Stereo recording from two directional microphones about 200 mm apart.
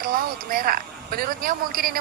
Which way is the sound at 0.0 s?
45° right (ahead or behind).